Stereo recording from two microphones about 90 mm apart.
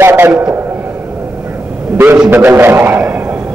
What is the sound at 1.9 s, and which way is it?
A man's voice, 25° right (ahead or behind).